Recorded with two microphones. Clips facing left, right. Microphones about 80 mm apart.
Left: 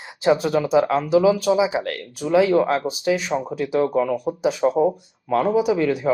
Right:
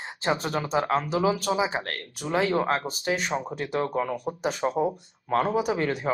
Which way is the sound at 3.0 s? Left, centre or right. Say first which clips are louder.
Left 6 dB; right.